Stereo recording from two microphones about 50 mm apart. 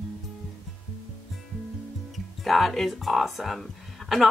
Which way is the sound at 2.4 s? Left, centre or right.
Centre.